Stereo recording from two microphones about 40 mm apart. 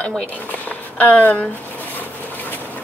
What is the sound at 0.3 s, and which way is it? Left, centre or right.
Speech, left.